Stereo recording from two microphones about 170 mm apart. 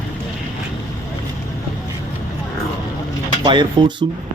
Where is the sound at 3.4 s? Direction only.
25° right (ahead or behind).